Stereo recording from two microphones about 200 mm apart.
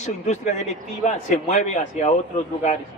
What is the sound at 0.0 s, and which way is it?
A man's voice, 35° left (ahead or behind).